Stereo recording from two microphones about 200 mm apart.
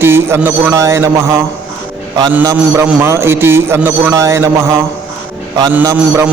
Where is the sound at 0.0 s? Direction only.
10° right (ahead or behind).